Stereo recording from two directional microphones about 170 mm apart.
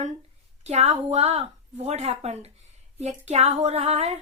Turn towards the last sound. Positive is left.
turn(degrees=-40)  # may be behind; listen again after turning